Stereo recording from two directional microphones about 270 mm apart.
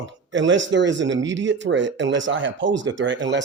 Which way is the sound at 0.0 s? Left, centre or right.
Right.